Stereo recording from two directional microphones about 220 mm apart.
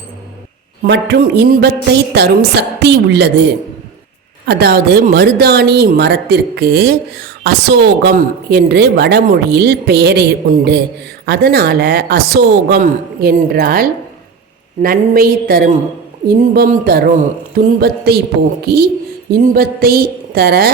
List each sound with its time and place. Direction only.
0.8 s a woman's voice: 50° right (ahead or behind)